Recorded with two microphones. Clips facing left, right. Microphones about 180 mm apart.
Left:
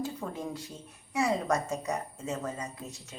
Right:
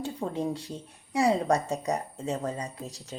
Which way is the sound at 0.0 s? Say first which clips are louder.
Right 4 dB; 30° right (ahead or behind).